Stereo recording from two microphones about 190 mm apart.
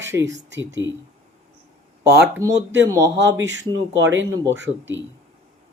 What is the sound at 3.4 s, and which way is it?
Speech, 75° right (ahead or behind).